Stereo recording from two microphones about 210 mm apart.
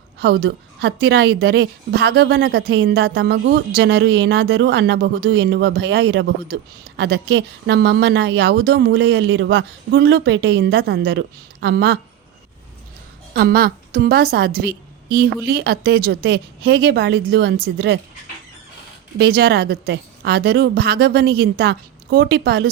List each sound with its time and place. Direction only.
0.2 s a woman's voice: 50° right (ahead or behind)
13.3 s a woman's voice: 45° right (ahead or behind)
19.2 s a woman's voice: 50° right (ahead or behind)